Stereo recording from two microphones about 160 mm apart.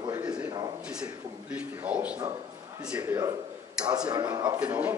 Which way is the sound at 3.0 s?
20° right (ahead or behind).